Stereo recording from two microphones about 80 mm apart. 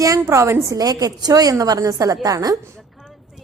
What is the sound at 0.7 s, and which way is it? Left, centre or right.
A woman's voice, right.